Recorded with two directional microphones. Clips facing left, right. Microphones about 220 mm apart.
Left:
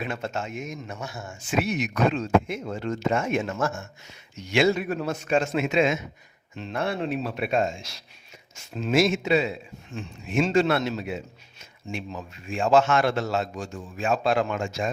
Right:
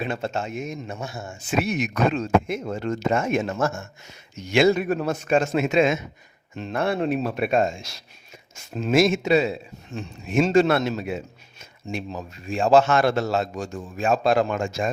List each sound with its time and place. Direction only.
0.0 s a man's voice: 30° right (ahead or behind); by 14.8 s 45° right (ahead or behind)